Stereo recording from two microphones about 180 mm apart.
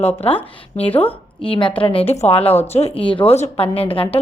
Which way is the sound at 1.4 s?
30° left (ahead or behind).